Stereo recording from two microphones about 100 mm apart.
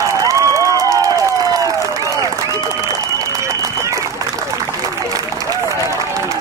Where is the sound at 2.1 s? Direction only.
35° right (ahead or behind).